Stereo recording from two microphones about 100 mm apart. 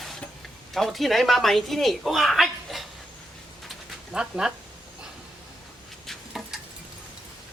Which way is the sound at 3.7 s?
5° right (ahead or behind).